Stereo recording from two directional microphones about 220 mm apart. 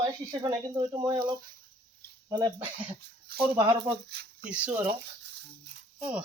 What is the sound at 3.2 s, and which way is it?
Speech, 45° right (ahead or behind).